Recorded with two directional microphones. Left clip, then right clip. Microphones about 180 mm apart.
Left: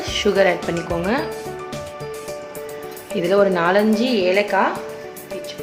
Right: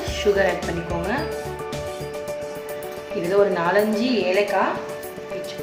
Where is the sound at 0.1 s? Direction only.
65° left (ahead or behind).